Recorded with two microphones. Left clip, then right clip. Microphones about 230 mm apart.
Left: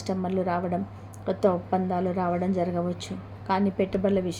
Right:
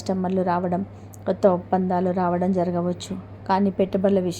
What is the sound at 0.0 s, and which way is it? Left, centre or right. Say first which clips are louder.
A woman's voice: right 4 dB; centre.